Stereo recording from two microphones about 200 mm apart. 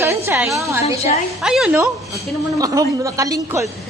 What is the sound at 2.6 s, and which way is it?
A woman's voice, 15° right (ahead or behind).